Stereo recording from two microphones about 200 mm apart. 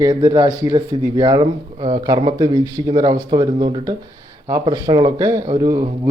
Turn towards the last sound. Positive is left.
turn(degrees=-20)  # may be behind; listen again after turning